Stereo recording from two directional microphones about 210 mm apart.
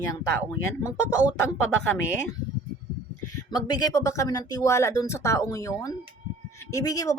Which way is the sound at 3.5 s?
20° left (ahead or behind).